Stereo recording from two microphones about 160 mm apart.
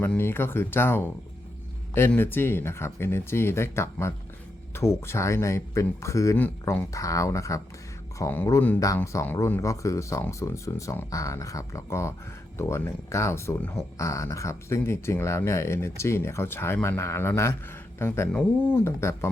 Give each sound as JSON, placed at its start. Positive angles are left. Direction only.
{"t": 0.0, "sound": "speech", "side_deg": 15}